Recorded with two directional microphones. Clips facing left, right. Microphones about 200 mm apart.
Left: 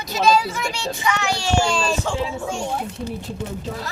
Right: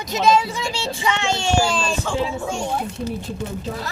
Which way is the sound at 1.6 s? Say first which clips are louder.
Left 2 dB; 5° right (ahead or behind).